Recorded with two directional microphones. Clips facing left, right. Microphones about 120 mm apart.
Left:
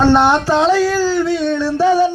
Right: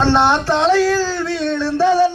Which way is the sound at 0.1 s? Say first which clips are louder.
Left 2 dB; 10° left (ahead or behind).